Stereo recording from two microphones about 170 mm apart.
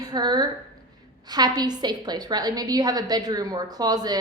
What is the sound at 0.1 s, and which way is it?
A woman's voice, 25° right (ahead or behind).